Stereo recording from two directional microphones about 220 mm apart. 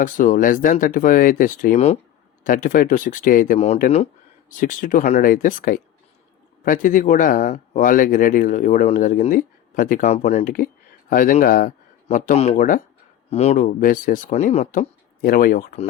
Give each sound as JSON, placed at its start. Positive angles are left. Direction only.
{"t": 0.0, "sound": "speech", "side_deg": 35}